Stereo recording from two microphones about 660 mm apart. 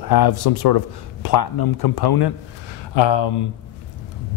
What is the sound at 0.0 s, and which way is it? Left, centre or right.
Speech, left.